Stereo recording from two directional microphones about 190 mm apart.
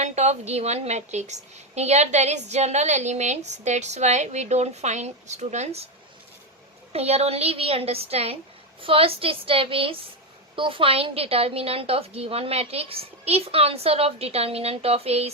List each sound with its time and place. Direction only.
0.0 s a woman's voice: 35° right (ahead or behind)
6.9 s a woman's voice: 35° right (ahead or behind)